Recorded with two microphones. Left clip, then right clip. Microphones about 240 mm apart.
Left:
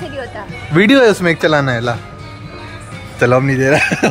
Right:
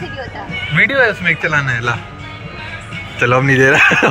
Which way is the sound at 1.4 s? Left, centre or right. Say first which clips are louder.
Left 2 dB; left.